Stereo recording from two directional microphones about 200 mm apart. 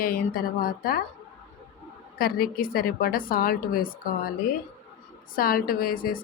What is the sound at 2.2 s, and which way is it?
A woman's voice, 50° left (ahead or behind).